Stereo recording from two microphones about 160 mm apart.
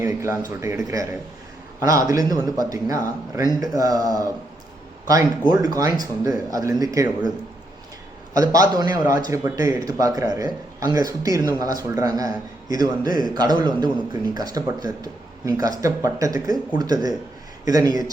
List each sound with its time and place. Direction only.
0.0 s a man's voice: 15° right (ahead or behind)
5.5 s a man's voice: 20° right (ahead or behind)
8.3 s a man's voice: 20° right (ahead or behind)